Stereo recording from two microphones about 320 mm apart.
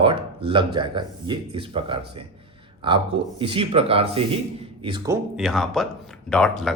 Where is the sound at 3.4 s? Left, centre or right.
Centre.